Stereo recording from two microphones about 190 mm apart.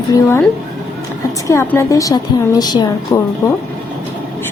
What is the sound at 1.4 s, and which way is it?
A woman's voice, 15° left (ahead or behind).